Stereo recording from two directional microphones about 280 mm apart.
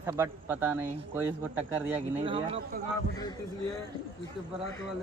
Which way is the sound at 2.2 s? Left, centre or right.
Centre.